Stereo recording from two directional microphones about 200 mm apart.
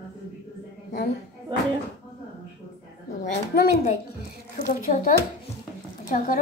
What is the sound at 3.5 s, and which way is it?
Speech, 50° left (ahead or behind).